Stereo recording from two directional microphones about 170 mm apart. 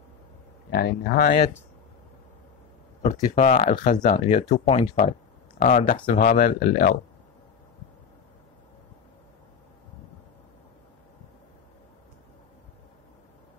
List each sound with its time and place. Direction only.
0.7 s speech: 65° left (ahead or behind)
3.0 s speech: 50° left (ahead or behind)